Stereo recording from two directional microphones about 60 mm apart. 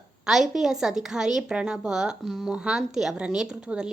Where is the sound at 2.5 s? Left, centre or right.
Centre.